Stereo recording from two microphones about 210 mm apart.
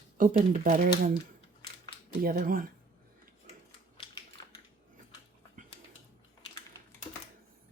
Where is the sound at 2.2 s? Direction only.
45° right (ahead or behind).